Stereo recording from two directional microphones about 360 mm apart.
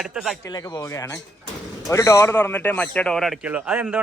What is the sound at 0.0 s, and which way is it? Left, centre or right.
Speech, centre.